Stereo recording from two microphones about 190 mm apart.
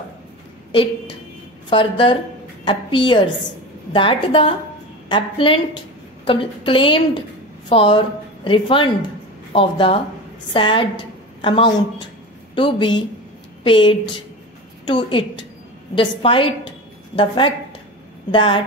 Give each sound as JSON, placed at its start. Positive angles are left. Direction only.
{"t": 0.7, "sound": "a woman's voice", "side_deg": 25}